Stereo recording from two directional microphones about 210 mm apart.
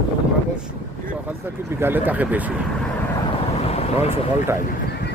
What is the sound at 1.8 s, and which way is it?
Speech, 10° right (ahead or behind).